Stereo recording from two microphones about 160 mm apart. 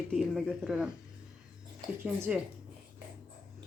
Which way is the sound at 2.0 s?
10° right (ahead or behind).